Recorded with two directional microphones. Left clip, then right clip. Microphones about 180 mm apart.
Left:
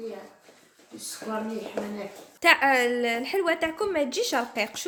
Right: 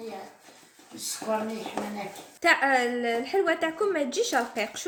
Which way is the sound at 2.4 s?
35° left (ahead or behind).